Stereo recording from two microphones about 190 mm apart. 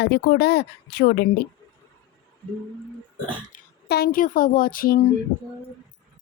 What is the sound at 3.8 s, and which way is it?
Speech, 55° left (ahead or behind).